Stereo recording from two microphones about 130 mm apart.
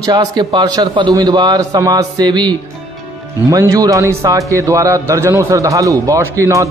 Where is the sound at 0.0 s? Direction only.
30° right (ahead or behind).